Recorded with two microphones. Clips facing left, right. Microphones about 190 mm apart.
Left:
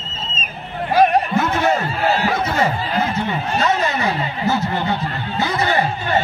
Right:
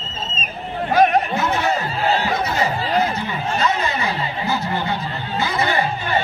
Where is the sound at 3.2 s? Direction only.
45° left (ahead or behind).